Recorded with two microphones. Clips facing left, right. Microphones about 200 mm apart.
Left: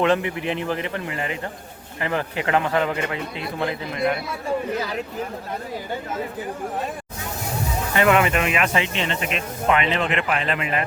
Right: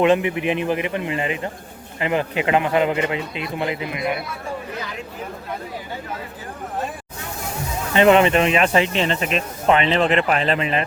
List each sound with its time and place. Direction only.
0.0 s speech: 20° right (ahead or behind)
7.9 s speech: 25° right (ahead or behind)